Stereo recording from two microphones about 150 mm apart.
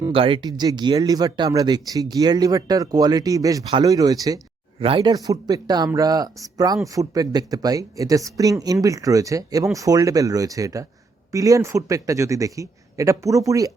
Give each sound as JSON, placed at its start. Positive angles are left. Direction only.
{"t": 0.1, "sound": "speech", "side_deg": -35}
{"t": 4.8, "sound": "speech", "side_deg": -40}
{"t": 5.1, "sound": "speech", "side_deg": -25}